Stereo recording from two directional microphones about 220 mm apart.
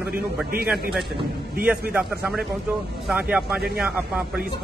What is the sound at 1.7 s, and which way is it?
A man's voice, 5° right (ahead or behind).